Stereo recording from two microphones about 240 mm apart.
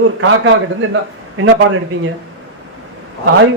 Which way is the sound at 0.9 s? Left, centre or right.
Right.